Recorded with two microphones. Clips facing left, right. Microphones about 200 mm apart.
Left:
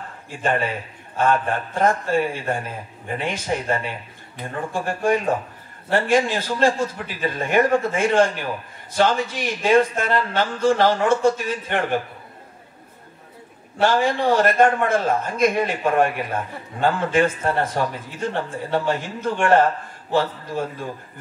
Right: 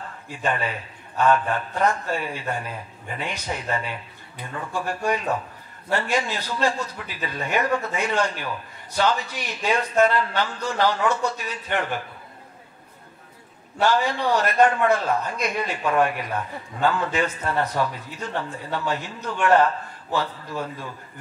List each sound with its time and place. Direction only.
0.4 s speech: 45° left (ahead or behind)
13.8 s speech: 50° left (ahead or behind)